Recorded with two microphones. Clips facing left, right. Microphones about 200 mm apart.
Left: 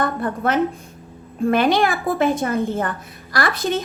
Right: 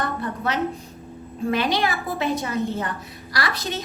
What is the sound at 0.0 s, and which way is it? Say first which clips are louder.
A woman's voice: left 5 dB; 50° left (ahead or behind).